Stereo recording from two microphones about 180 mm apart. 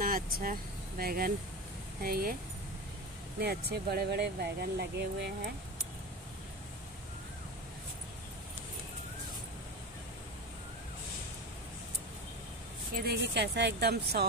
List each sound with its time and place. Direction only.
0.0 s speech: 50° right (ahead or behind)
3.3 s speech: 60° right (ahead or behind)
13.0 s speech: 65° right (ahead or behind)